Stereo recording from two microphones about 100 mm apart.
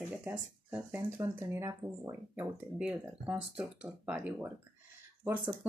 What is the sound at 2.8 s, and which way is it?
Speech, 15° right (ahead or behind).